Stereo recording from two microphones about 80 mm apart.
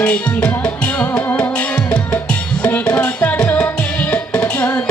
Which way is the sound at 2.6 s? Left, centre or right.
Centre.